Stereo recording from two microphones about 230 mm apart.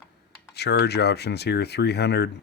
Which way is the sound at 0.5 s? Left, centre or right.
Left.